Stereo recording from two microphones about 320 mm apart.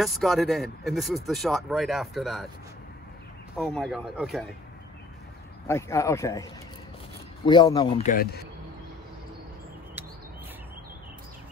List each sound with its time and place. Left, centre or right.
0.0 s speech: centre
3.5 s speech: centre
5.7 s speech: centre
7.4 s speech: centre